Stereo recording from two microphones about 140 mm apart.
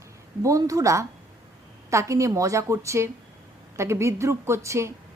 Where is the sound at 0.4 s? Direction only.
25° right (ahead or behind).